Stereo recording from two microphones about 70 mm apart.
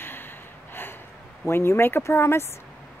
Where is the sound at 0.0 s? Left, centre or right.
Left.